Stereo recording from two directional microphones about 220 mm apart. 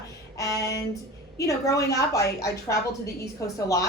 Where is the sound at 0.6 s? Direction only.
50° left (ahead or behind).